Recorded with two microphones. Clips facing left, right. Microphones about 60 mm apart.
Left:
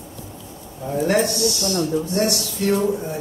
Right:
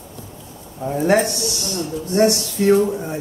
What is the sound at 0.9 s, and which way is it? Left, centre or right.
Speech, right.